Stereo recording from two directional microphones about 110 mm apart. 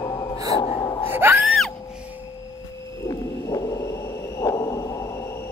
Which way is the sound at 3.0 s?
30° left (ahead or behind).